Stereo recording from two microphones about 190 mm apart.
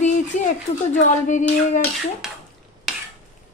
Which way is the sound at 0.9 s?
40° left (ahead or behind).